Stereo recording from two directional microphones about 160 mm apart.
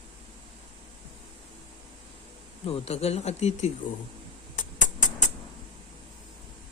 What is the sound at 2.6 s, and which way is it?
Speech, 40° left (ahead or behind).